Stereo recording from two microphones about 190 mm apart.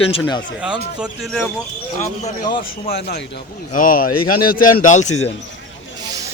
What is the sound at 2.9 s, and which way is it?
Speech, 55° left (ahead or behind).